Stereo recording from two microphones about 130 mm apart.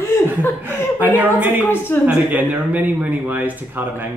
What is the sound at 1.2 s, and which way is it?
Speech, 15° right (ahead or behind).